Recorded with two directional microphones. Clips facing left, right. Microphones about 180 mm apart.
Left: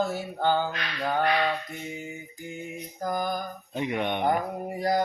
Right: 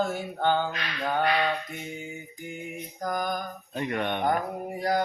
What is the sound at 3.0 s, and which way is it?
Speech, 5° left (ahead or behind).